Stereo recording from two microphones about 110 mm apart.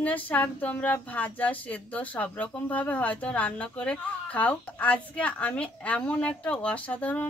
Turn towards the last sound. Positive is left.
turn(degrees=10)  # may be behind; listen again after turning